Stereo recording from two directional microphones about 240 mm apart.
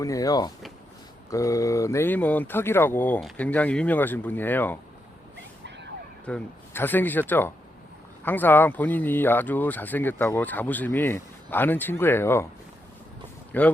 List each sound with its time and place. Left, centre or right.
0.0 s speech: centre
5.6 s a sound: right
6.2 s speech: centre
13.5 s speech: centre